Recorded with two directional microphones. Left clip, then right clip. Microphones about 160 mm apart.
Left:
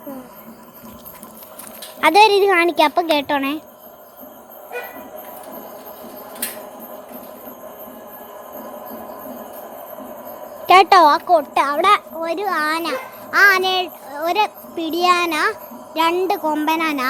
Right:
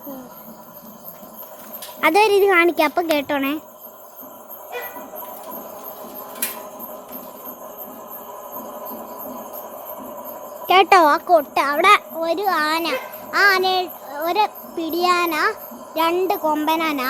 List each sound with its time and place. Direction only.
2.0 s speech: centre (ahead or behind)
10.8 s a child's voice: 15° right (ahead or behind)
13.3 s a child's voice: 10° left (ahead or behind)